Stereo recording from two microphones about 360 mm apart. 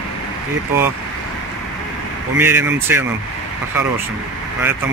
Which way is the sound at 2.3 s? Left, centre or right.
Centre.